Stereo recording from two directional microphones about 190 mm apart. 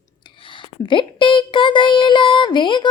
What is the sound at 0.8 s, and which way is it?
Speech, 25° left (ahead or behind).